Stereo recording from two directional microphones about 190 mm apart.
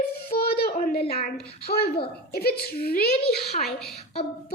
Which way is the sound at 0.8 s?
50° left (ahead or behind).